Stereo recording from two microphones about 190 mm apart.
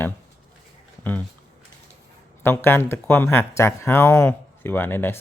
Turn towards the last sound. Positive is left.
turn(degrees=10)  # may be behind; listen again after turning